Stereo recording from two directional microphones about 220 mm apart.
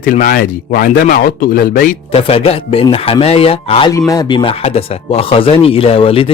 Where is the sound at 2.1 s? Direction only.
25° left (ahead or behind).